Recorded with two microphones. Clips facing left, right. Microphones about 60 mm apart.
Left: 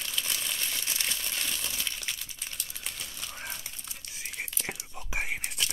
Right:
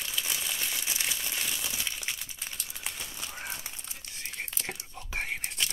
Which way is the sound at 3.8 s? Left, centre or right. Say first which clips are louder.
Even; centre.